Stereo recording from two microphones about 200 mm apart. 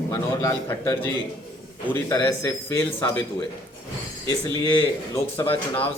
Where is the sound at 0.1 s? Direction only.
15° left (ahead or behind).